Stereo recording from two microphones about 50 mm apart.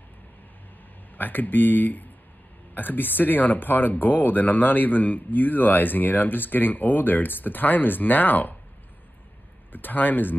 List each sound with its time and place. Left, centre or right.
1.1 s speech: left
9.7 s speech: left